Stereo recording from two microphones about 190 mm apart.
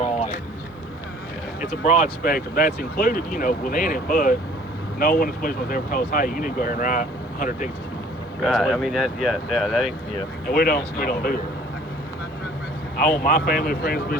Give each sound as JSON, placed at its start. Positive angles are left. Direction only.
{"t": 1.9, "sound": "speech", "side_deg": 45}
{"t": 8.4, "sound": "speech", "side_deg": 0}
{"t": 10.5, "sound": "speech", "side_deg": 50}
{"t": 13.0, "sound": "speech", "side_deg": 50}